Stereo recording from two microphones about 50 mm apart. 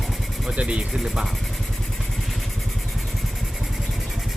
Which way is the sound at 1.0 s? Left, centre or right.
Centre.